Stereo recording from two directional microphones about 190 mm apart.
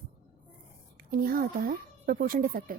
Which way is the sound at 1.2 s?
50° right (ahead or behind).